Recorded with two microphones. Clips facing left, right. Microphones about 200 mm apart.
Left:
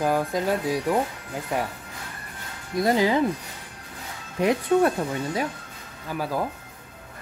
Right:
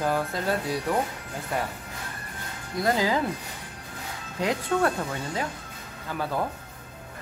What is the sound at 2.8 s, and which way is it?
Speech, 20° left (ahead or behind).